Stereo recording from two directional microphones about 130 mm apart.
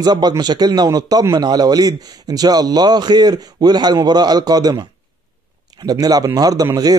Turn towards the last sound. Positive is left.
turn(degrees=-30)  # may be behind; listen again after turning